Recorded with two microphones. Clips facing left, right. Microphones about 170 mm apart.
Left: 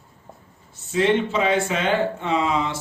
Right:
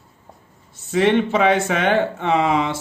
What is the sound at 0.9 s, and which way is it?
Speech, 60° right (ahead or behind).